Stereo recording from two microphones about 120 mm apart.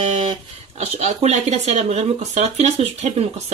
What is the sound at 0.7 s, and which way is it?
Speech, 70° right (ahead or behind).